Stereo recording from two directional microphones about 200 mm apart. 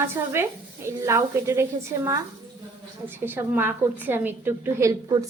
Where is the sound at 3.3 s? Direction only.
10° right (ahead or behind).